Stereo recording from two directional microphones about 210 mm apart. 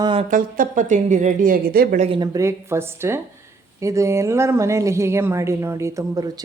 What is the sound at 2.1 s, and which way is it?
A woman's voice, 20° right (ahead or behind).